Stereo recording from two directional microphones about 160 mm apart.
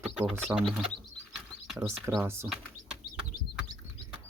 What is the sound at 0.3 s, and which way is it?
Speech, centre (ahead or behind).